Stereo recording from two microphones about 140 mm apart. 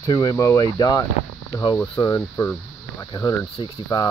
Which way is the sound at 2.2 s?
15° left (ahead or behind).